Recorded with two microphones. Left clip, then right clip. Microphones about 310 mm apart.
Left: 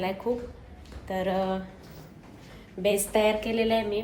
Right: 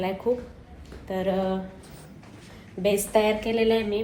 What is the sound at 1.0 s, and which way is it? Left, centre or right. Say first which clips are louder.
Speech: right 1 dB; centre.